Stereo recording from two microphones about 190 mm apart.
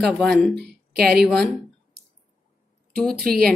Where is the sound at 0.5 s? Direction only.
60° right (ahead or behind).